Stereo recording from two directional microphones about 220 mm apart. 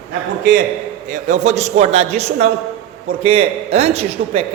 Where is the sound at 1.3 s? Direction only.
30° right (ahead or behind).